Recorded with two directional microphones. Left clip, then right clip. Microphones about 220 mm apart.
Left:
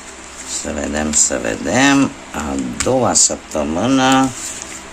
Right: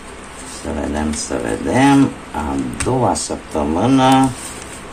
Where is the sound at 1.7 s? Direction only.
35° left (ahead or behind).